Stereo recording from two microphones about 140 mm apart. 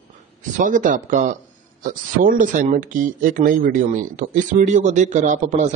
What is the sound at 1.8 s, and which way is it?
Speech, 75° right (ahead or behind).